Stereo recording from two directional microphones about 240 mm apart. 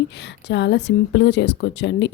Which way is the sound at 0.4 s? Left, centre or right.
Left.